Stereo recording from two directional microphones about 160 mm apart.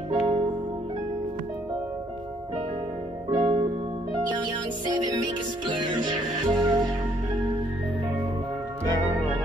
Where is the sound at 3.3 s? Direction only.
30° right (ahead or behind).